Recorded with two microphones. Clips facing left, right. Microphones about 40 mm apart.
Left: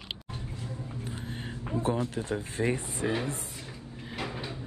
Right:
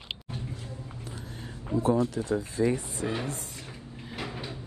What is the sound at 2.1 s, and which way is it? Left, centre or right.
Speech, left.